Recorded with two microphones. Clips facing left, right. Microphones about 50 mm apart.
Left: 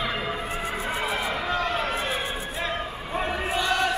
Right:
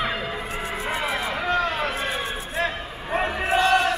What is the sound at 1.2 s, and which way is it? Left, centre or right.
Vehicle, centre.